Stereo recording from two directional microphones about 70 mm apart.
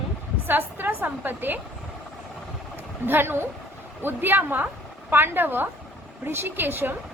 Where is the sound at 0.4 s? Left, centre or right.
Right.